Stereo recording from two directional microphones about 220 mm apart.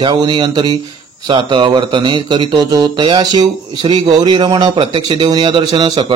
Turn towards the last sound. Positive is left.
turn(degrees=-20)  # may be behind; listen again after turning